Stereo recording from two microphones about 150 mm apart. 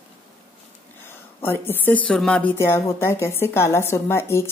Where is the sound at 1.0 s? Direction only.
15° left (ahead or behind).